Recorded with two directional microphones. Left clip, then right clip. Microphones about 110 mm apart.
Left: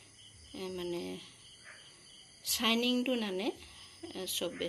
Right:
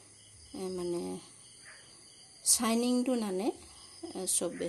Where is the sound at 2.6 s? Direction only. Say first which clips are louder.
Left 2 dB; 35° right (ahead or behind).